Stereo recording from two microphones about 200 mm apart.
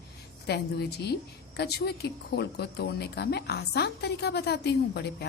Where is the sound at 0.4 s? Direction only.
55° left (ahead or behind).